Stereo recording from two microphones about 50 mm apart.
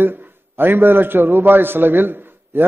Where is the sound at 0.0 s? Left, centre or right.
Right.